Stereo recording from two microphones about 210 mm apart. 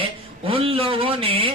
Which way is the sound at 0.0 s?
25° right (ahead or behind).